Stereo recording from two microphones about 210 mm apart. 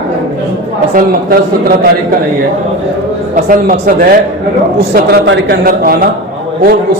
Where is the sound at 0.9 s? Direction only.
45° right (ahead or behind).